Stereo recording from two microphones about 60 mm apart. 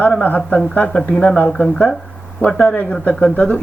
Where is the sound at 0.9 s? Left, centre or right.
Centre.